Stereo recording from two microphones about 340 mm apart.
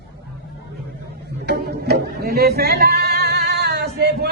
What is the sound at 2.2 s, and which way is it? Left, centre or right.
Female singing, right.